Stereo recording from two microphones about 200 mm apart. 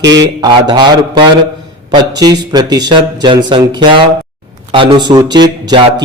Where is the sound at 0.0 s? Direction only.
60° right (ahead or behind).